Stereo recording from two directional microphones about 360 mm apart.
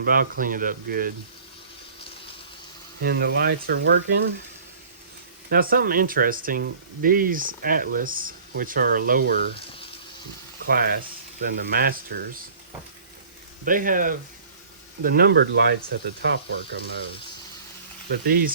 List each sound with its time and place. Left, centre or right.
0.0 s speech: right
3.0 s speech: right
5.5 s speech: right
9.6 s water: centre
10.7 s speech: right
13.7 s speech: right
18.1 s speech: right